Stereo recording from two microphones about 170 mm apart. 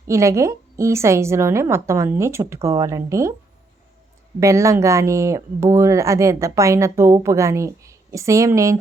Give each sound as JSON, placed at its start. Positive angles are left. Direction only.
{"t": 0.1, "sound": "speech", "side_deg": -15}
{"t": 4.4, "sound": "speech", "side_deg": -15}